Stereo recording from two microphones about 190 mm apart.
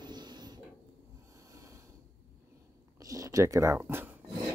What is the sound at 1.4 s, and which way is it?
Snort, 15° right (ahead or behind).